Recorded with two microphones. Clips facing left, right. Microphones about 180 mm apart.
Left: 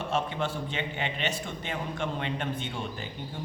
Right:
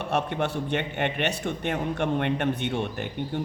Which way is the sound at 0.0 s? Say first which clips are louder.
Right 3 dB; 65° right (ahead or behind).